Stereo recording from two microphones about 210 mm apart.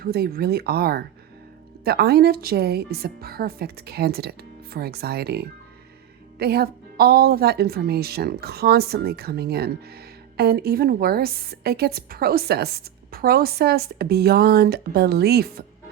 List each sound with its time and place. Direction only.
0.0 s a woman's voice: 45° right (ahead or behind)